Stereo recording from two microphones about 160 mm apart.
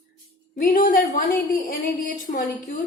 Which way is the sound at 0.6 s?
60° left (ahead or behind).